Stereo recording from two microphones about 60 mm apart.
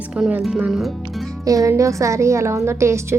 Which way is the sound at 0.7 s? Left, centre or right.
Centre.